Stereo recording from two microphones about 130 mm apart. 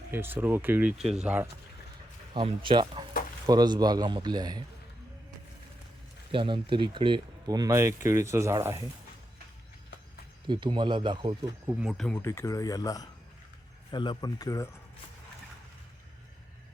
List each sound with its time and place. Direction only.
0.1 s speech: 15° right (ahead or behind)
2.3 s speech: 40° right (ahead or behind)
6.3 s speech: 40° right (ahead or behind); by 8.9 s 20° right (ahead or behind)
10.4 s speech: 35° right (ahead or behind)
11.8 s speech: centre (ahead or behind)
12.1 s speech: 20° left (ahead or behind)